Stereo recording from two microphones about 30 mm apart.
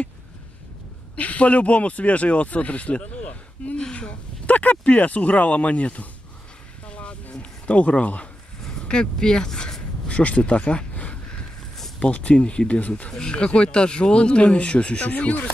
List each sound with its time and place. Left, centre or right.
1.1 s speech: left
4.5 s speech: left
6.9 s music: left
7.6 s speech: left
8.8 s speech: left
10.0 s a sound: left
12.0 s speech: left
13.3 s speech: left